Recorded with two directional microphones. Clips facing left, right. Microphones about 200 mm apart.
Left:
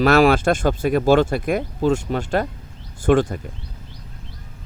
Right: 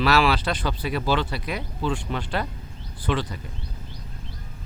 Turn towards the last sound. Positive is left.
turn(degrees=50)  # may be behind; listen again after turning